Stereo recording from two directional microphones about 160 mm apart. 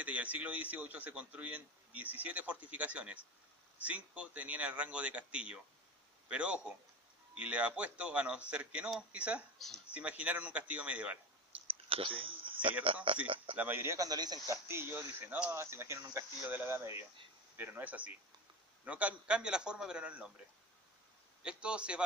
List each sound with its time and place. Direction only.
0.0 s a man's voice: 10° right (ahead or behind)
11.6 s a sound: 35° right (ahead or behind)
12.8 s speech: 35° right (ahead or behind)
13.6 s speech: 15° right (ahead or behind)
21.4 s speech: 5° right (ahead or behind)